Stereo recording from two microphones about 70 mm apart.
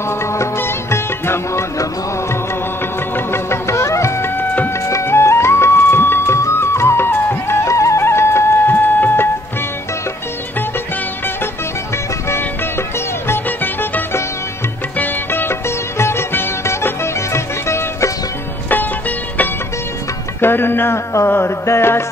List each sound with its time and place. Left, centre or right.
0.3 s music: left
3.3 s music: left
8.8 s a sound: left
13.3 s music: left
18.7 s music: left